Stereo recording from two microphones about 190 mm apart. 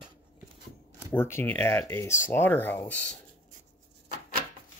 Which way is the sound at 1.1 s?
10° left (ahead or behind).